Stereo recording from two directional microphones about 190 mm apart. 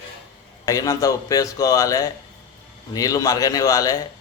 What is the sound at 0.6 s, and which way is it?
A man's voice, 20° left (ahead or behind).